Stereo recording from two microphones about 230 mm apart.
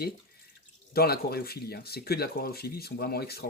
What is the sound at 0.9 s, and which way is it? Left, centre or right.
Speech, left.